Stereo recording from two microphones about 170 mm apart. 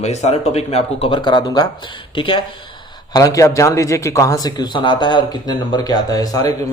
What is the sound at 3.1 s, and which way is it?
Speech, 20° left (ahead or behind).